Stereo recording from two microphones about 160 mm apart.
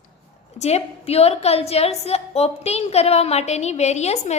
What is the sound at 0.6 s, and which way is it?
A woman's voice, 40° left (ahead or behind).